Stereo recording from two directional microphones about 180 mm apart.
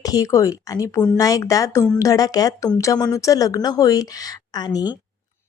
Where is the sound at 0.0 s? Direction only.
20° left (ahead or behind).